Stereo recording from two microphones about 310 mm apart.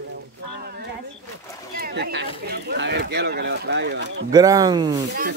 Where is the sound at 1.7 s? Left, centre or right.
Right.